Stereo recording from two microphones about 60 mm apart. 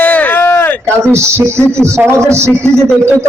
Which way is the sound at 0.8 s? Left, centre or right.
Right.